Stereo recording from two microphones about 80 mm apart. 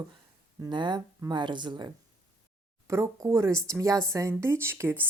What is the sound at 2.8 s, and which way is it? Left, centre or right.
A woman's voice, right.